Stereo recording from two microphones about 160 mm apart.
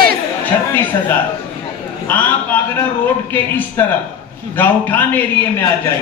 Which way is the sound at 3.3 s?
10° left (ahead or behind).